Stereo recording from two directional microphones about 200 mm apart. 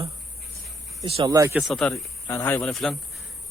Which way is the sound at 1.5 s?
Centre (ahead or behind).